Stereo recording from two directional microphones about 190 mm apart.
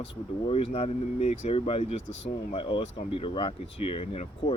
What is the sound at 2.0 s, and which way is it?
Speech, 75° left (ahead or behind).